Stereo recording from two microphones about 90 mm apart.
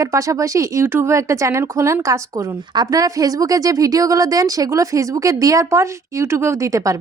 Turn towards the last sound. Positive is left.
turn(degrees=-35)  # may be behind; listen again after turning